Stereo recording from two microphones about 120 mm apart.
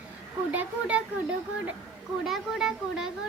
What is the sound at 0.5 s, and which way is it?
Speech, 10° right (ahead or behind).